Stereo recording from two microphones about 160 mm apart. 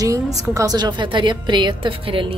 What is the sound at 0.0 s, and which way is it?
A woman's voice, 20° right (ahead or behind).